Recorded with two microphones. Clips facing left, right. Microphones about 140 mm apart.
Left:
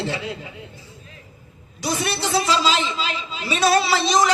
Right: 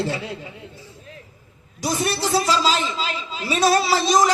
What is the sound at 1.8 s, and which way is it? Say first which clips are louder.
A man's voice: right 1 dB; 40° right (ahead or behind).